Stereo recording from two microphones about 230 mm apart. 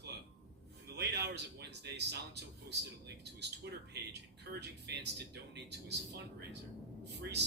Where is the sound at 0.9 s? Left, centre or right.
Right.